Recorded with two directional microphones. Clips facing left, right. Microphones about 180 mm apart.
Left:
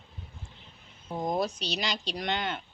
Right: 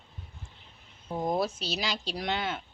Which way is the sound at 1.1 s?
5° right (ahead or behind).